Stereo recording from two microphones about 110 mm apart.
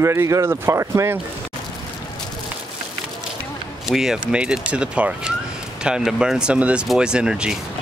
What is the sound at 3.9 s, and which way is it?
Speech, 5° right (ahead or behind).